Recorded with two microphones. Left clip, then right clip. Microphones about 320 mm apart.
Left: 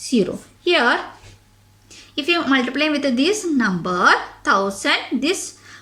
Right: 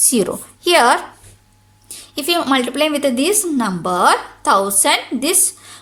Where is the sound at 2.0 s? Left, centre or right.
Centre.